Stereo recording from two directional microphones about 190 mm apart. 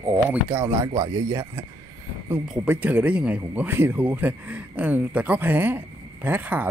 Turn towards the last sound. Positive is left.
turn(degrees=-10)  # may be behind; listen again after turning